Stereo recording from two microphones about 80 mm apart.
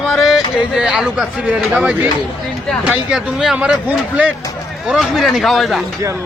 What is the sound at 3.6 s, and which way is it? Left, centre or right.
Speech, centre.